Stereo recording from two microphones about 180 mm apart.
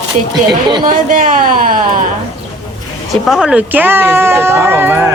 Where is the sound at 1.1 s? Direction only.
45° right (ahead or behind).